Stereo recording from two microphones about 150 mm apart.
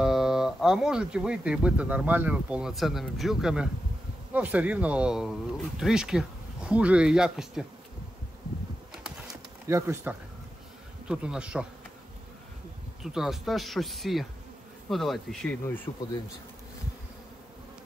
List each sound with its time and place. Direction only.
0.0 s speech: 5° right (ahead or behind)
9.3 s a sound: 20° right (ahead or behind)
11.1 s bee: 5° right (ahead or behind)
13.0 s speech: 5° right (ahead or behind)
15.9 s speech: 30° left (ahead or behind)